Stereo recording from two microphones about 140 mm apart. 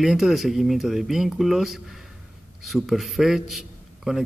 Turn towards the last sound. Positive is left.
turn(degrees=-5)  # may be behind; listen again after turning